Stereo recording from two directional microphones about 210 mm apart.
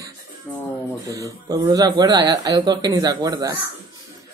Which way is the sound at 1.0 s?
15° right (ahead or behind).